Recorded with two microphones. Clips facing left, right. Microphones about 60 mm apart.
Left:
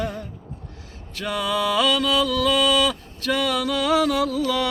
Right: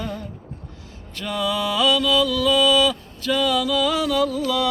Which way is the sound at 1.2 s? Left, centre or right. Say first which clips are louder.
Even; left.